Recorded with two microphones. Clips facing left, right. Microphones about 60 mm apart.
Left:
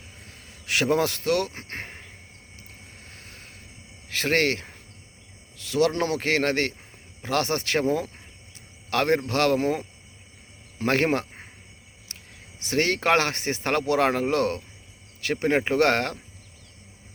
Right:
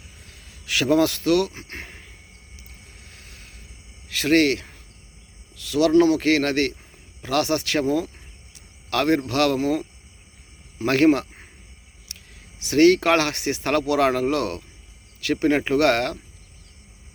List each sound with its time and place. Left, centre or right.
0.4 s speech: left
3.1 s a sound: left
4.1 s speech: left
10.8 s speech: left
12.1 s a sound: left
12.5 s speech: left